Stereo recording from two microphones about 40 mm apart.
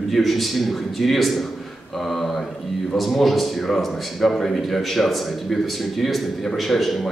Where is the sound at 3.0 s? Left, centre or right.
Centre.